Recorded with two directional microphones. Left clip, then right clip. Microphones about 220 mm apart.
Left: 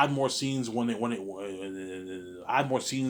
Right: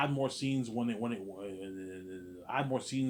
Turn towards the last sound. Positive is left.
turn(degrees=20)  # may be behind; listen again after turning